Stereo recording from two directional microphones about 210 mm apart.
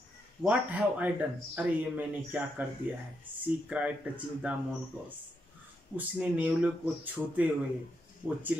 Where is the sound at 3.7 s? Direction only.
5° right (ahead or behind).